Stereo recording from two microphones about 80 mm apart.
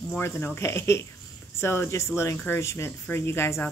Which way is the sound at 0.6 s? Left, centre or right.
Left.